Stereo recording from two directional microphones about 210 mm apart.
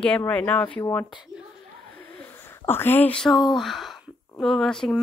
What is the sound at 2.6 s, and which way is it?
A woman's voice, 10° left (ahead or behind).